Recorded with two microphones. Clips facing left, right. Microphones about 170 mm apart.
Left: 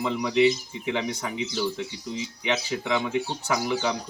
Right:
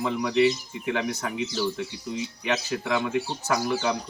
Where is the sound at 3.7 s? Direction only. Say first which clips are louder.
Even; 10° left (ahead or behind).